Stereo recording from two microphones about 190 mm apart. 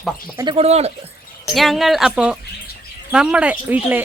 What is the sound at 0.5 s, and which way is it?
Speech, 35° right (ahead or behind).